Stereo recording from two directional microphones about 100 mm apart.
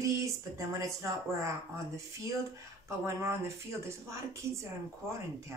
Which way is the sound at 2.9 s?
30° right (ahead or behind).